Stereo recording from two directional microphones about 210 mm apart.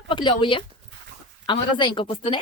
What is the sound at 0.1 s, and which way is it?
A woman's voice, 25° left (ahead or behind).